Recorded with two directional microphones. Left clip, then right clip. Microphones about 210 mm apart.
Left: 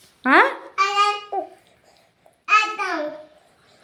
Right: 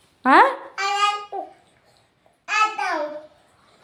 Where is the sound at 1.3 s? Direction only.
40° left (ahead or behind).